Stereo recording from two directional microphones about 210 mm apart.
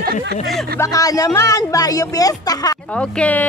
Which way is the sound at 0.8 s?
15° left (ahead or behind).